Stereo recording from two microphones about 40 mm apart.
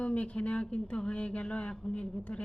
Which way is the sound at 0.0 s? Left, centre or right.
Left.